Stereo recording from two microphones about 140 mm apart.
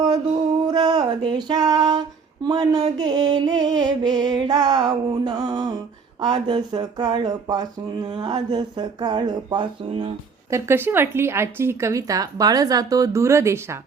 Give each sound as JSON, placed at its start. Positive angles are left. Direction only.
{"t": 0.6, "sound": "music", "side_deg": -30}
{"t": 2.4, "sound": "a woman's voice", "side_deg": -30}
{"t": 3.0, "sound": "music", "side_deg": -30}
{"t": 10.5, "sound": "a woman's voice", "side_deg": -15}